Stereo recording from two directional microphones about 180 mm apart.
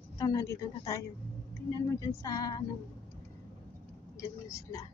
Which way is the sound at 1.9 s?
20° left (ahead or behind).